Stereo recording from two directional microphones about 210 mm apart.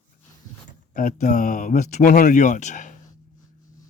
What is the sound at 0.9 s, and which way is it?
Speech, 40° left (ahead or behind).